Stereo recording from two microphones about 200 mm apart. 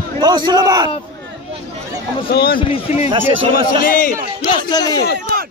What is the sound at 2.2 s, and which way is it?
Speech, 50° left (ahead or behind).